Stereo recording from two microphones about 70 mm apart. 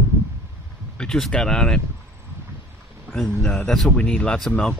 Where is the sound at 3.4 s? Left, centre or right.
Centre.